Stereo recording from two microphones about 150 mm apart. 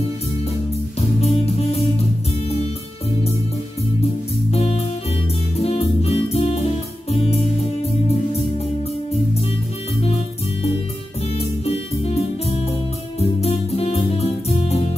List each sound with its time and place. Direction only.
1.2 s music: 40° left (ahead or behind)
4.0 s music: 45° left (ahead or behind)
10.0 s music: 40° left (ahead or behind)